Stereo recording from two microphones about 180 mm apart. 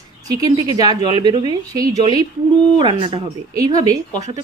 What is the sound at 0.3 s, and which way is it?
Speech, 20° right (ahead or behind).